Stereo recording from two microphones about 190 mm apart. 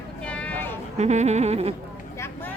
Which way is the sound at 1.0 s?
35° right (ahead or behind).